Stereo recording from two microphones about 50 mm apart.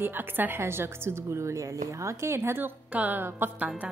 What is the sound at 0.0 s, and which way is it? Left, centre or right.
A woman's voice, right.